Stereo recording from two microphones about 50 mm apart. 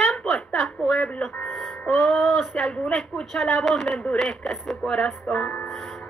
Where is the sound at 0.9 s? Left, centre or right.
Left.